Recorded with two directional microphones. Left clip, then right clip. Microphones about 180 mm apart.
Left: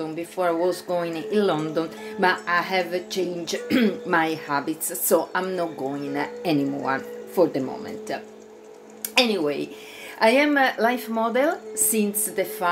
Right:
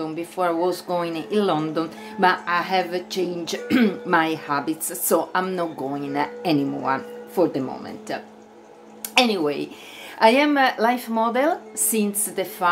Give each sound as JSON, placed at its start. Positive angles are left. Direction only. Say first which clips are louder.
{"t": 0.0, "sound": "speech", "louder": "right 1 dB", "side_deg": -15}